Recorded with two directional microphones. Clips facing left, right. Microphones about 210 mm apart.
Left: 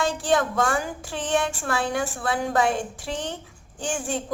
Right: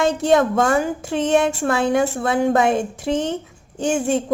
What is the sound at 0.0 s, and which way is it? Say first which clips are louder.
A woman's voice: right 7 dB; 20° right (ahead or behind).